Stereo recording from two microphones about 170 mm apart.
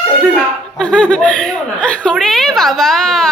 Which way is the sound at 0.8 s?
5° left (ahead or behind).